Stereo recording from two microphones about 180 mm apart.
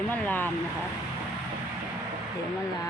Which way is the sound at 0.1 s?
10° left (ahead or behind).